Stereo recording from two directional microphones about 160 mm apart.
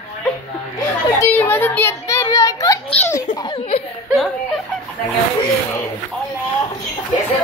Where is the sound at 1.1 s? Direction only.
10° left (ahead or behind).